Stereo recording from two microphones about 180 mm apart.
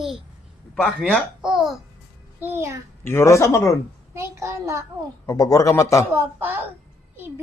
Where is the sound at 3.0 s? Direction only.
15° left (ahead or behind).